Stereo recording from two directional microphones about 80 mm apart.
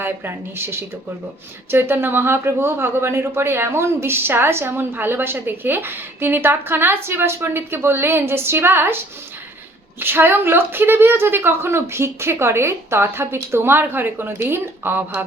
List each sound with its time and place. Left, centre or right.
0.0 s speech: right